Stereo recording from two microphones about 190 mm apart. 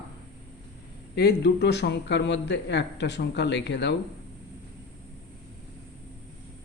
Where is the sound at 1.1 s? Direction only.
60° left (ahead or behind).